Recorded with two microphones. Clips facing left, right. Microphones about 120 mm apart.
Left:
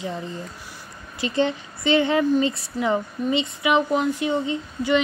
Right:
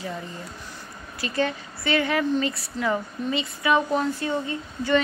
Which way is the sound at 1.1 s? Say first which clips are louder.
Left 3 dB; 25° left (ahead or behind).